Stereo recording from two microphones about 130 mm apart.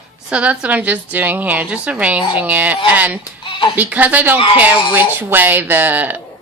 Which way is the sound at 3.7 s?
10° right (ahead or behind).